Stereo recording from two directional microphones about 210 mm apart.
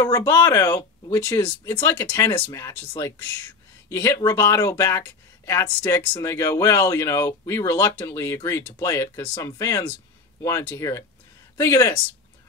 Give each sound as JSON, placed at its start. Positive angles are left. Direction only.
{"t": 0.0, "sound": "speech", "side_deg": 15}